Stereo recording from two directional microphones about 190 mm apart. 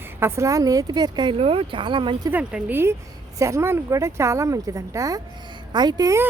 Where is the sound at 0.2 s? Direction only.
15° right (ahead or behind).